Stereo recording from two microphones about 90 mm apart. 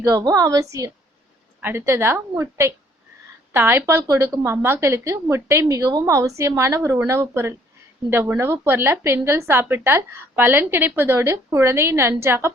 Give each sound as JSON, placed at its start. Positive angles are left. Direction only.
{"t": 0.0, "sound": "a woman's voice", "side_deg": -35}